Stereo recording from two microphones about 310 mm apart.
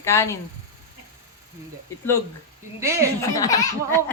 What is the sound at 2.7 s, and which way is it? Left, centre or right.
Speech, centre.